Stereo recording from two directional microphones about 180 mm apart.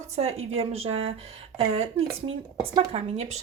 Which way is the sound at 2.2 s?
35° right (ahead or behind).